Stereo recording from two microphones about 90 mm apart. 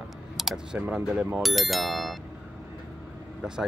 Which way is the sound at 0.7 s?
15° right (ahead or behind).